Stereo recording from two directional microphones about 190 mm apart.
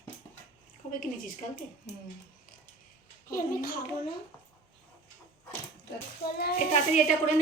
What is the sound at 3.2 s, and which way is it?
Speech, 50° left (ahead or behind).